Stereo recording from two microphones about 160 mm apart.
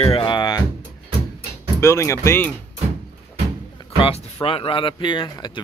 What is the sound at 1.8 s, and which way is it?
Speech, 15° left (ahead or behind).